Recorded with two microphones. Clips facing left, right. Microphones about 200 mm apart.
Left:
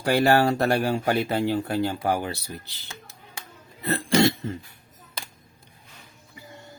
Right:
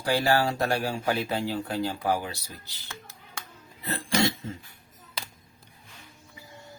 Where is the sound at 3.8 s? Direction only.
65° left (ahead or behind).